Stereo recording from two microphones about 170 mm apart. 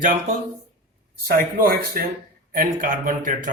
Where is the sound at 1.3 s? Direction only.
60° right (ahead or behind).